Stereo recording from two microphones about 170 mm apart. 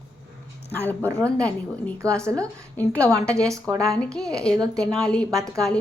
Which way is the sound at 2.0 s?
15° right (ahead or behind).